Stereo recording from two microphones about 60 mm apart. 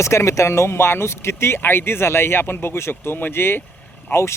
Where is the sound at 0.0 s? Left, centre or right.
Left.